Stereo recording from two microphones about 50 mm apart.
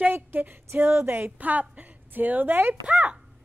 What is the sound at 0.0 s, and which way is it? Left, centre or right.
Female singing, right.